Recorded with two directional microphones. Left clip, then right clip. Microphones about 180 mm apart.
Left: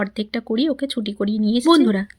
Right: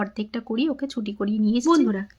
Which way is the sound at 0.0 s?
20° left (ahead or behind).